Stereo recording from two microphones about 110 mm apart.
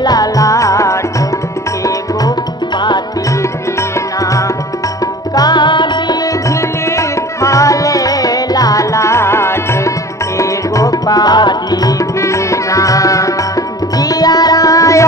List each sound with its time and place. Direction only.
0.0 s music: 35° left (ahead or behind)
4.2 s music: 30° left (ahead or behind)
7.0 s music: 30° left (ahead or behind)